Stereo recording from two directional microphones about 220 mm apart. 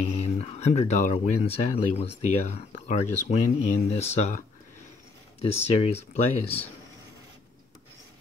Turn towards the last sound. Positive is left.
turn(degrees=30)  # may be behind; listen again after turning